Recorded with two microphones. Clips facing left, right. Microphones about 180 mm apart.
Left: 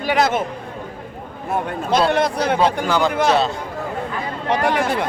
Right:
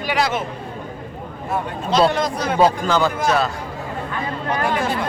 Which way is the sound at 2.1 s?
65° left (ahead or behind).